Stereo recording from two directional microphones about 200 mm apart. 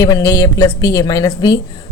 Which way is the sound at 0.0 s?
15° left (ahead or behind).